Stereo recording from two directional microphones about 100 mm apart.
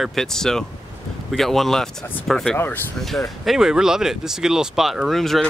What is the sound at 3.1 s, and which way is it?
Speech, centre (ahead or behind).